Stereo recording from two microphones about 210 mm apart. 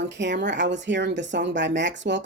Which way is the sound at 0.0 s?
60° right (ahead or behind).